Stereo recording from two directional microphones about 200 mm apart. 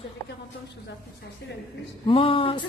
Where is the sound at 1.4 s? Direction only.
60° left (ahead or behind).